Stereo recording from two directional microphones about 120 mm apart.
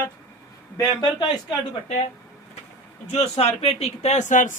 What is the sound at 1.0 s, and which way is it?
Speech, 40° left (ahead or behind).